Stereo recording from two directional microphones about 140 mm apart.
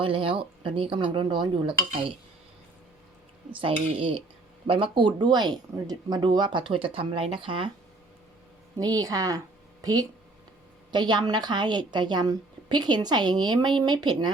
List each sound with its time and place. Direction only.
0.0 s a woman's voice: 40° right (ahead or behind)
3.5 s a woman's voice: 40° right (ahead or behind)
8.8 s a woman's voice: 25° right (ahead or behind)